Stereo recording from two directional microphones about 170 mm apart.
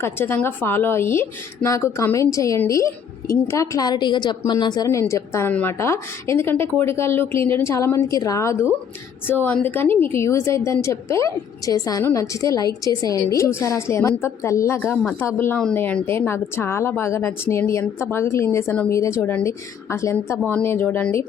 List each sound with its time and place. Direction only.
0.0 s a woman's voice: 15° left (ahead or behind)